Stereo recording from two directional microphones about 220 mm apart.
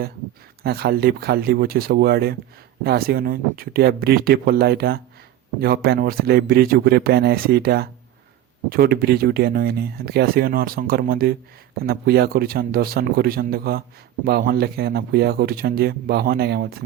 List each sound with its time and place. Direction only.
0.6 s speech: 45° right (ahead or behind)